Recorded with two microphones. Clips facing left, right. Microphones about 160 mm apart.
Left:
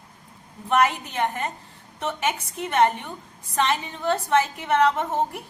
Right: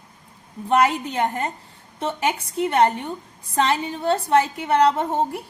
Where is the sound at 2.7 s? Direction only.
35° right (ahead or behind).